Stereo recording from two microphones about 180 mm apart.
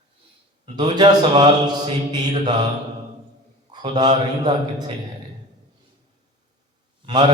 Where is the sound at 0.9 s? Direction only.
25° right (ahead or behind).